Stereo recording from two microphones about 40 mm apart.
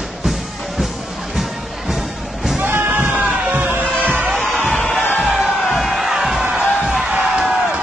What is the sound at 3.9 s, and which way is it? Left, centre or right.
Music, left.